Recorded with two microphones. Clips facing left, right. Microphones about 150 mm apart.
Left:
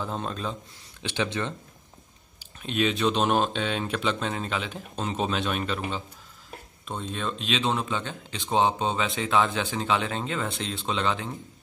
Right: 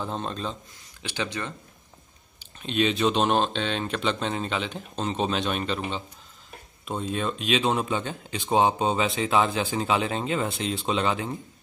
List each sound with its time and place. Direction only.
0.0 s speech: 5° left (ahead or behind)
1.0 s speech: 20° left (ahead or behind)
2.6 s speech: 5° left (ahead or behind)
6.9 s speech: 10° right (ahead or behind)